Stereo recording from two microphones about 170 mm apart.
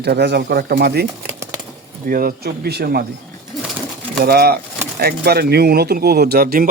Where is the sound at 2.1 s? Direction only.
60° right (ahead or behind).